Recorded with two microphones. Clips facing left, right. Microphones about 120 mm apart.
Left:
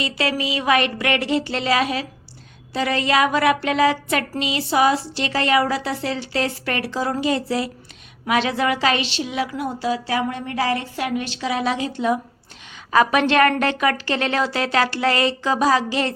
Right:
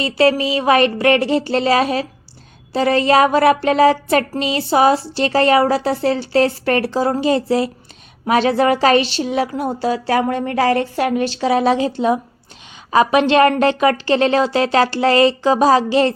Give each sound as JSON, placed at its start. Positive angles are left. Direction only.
{"t": 0.0, "sound": "a woman's voice", "side_deg": -35}